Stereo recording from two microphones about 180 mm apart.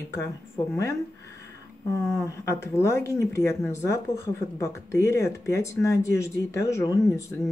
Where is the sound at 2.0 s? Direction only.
15° left (ahead or behind).